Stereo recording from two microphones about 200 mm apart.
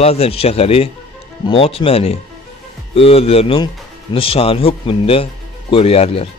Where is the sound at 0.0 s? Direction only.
30° left (ahead or behind).